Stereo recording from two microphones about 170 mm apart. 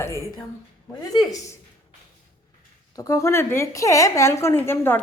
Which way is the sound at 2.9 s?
20° left (ahead or behind).